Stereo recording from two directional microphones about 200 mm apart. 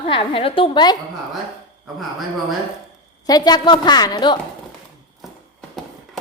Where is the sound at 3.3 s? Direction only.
20° left (ahead or behind).